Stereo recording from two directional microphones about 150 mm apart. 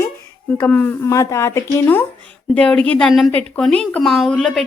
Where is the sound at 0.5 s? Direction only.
10° left (ahead or behind).